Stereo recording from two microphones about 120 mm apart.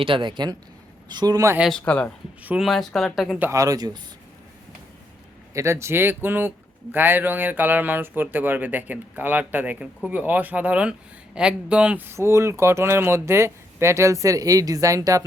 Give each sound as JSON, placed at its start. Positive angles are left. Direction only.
{"t": 0.0, "sound": "speech", "side_deg": -45}
{"t": 1.8, "sound": "speech", "side_deg": 10}
{"t": 3.5, "sound": "speech", "side_deg": -30}
{"t": 5.5, "sound": "speech", "side_deg": -25}